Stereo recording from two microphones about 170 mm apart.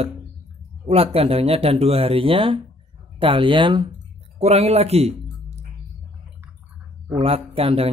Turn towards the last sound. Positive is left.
turn(degrees=-35)  # may be behind; listen again after turning